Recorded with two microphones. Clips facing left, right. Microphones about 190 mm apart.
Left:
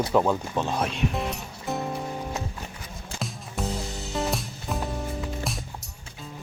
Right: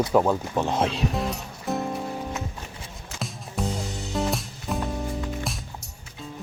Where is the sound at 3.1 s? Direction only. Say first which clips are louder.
Right 1 dB; centre (ahead or behind).